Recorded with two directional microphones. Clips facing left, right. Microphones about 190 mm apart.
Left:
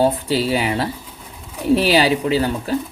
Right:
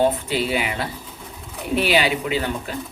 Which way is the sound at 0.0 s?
35° left (ahead or behind).